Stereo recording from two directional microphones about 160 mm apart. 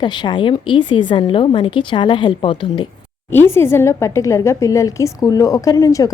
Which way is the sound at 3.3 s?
15° left (ahead or behind).